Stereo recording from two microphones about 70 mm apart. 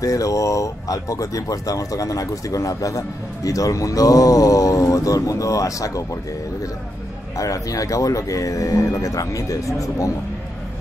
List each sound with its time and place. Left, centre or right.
0.0 s speech: left
7.3 s speech: left